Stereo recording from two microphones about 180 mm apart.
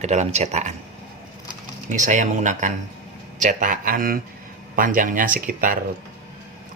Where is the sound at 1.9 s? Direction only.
45° right (ahead or behind).